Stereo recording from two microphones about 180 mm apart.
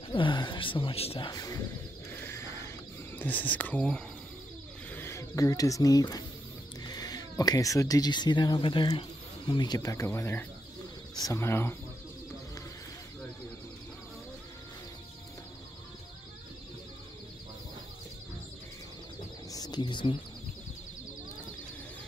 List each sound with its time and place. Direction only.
0.1 s speech: 25° left (ahead or behind)
1.3 s speech: 20° left (ahead or behind)
2.2 s mechanisms: 15° left (ahead or behind)
3.2 s speech: 10° left (ahead or behind)
19.5 s ratchet: 20° left (ahead or behind)